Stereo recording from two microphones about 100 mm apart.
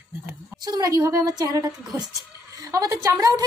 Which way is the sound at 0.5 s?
40° right (ahead or behind).